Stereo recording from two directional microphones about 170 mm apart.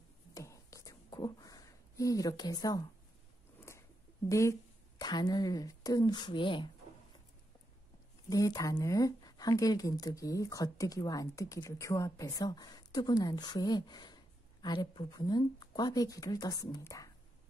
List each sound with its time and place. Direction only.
0.3 s a sound: 20° left (ahead or behind)
4.3 s speech: 15° left (ahead or behind)
8.3 s speech: 20° left (ahead or behind)